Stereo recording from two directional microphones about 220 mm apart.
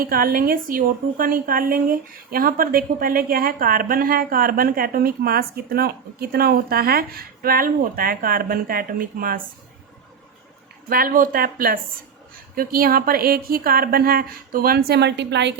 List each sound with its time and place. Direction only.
0.0 s a woman's voice: 40° right (ahead or behind)
10.8 s a woman's voice: 40° right (ahead or behind)